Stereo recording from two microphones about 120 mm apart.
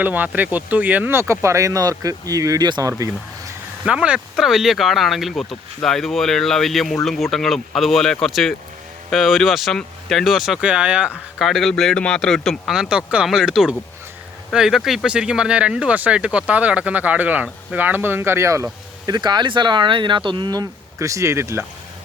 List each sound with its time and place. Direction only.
0.0 s speech: 15° right (ahead or behind); by 2.9 s 35° right (ahead or behind)
3.0 s a sound: 25° right (ahead or behind)
3.8 s speech: 10° right (ahead or behind)